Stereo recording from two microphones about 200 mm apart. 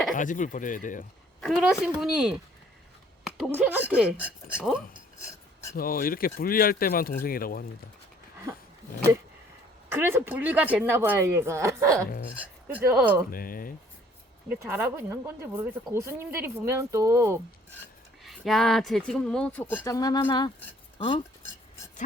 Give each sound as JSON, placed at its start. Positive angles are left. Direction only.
{"t": 0.1, "sound": "speech", "side_deg": 40}
{"t": 1.4, "sound": "speech", "side_deg": 0}
{"t": 5.7, "sound": "speech", "side_deg": 45}
{"t": 9.9, "sound": "speech", "side_deg": -10}
{"t": 13.3, "sound": "speech", "side_deg": 45}
{"t": 14.5, "sound": "speech", "side_deg": -10}
{"t": 18.2, "sound": "speech", "side_deg": 0}